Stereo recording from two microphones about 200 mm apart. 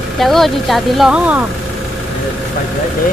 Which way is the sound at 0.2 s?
Centre (ahead or behind).